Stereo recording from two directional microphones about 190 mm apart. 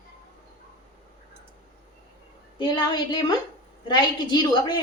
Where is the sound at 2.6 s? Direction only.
20° left (ahead or behind).